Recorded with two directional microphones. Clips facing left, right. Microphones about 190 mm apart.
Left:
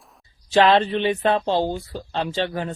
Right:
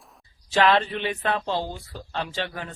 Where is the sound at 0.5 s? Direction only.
25° left (ahead or behind).